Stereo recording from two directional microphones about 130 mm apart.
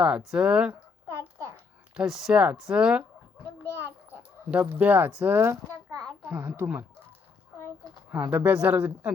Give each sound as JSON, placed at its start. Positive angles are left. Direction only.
{"t": 0.0, "sound": "speech", "side_deg": -5}
{"t": 1.0, "sound": "a sound", "side_deg": -20}
{"t": 2.0, "sound": "speech", "side_deg": -5}
{"t": 4.6, "sound": "speech", "side_deg": -15}
{"t": 8.1, "sound": "speech", "side_deg": -15}